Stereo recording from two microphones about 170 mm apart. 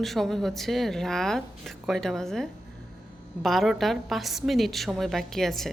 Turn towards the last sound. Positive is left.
turn(degrees=0)  # may be behind; listen again after turning